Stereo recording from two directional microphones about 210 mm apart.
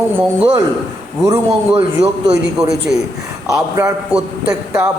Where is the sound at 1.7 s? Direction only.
25° right (ahead or behind).